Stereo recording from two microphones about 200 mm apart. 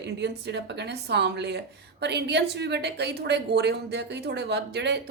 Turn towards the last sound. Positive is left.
turn(degrees=-60)  # may be behind; listen again after turning